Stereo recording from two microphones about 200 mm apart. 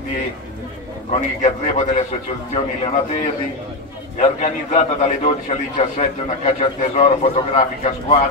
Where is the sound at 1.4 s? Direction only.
35° left (ahead or behind).